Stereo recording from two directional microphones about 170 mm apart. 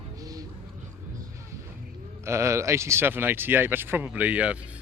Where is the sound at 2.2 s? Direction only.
15° right (ahead or behind).